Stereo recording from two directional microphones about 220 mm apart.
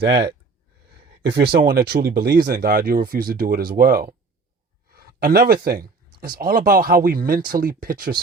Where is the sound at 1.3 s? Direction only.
45° right (ahead or behind).